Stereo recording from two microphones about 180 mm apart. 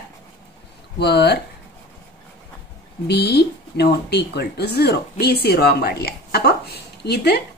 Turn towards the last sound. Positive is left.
turn(degrees=65)  # may be behind; listen again after turning